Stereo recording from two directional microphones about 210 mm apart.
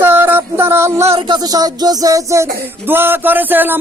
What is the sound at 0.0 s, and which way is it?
Music, 10° right (ahead or behind).